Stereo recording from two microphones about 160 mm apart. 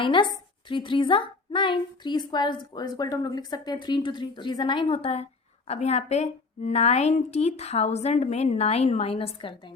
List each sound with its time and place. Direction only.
0.0 s a woman's voice: 30° left (ahead or behind)